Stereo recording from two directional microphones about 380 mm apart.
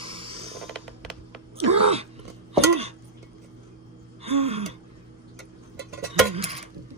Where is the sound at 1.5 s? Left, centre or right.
Centre.